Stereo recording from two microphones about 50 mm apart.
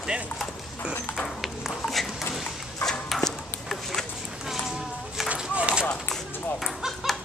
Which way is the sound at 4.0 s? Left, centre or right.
Centre.